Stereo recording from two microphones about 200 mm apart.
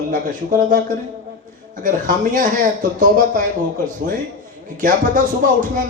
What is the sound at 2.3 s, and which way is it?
Speech, 40° right (ahead or behind).